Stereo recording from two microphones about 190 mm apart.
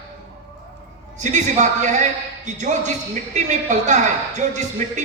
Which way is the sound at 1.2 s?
40° right (ahead or behind).